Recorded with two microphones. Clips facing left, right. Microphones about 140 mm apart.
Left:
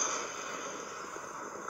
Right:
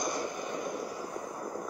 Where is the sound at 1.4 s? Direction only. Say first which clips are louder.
Right 6 dB; 30° right (ahead or behind).